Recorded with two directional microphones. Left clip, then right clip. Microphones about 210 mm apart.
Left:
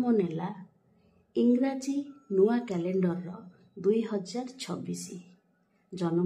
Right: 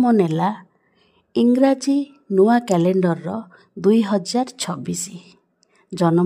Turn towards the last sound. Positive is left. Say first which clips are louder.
# right 12 dB
turn(degrees=-45)  # may be behind; listen again after turning